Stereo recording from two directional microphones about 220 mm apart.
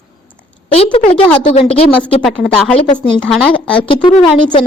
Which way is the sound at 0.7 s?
25° left (ahead or behind).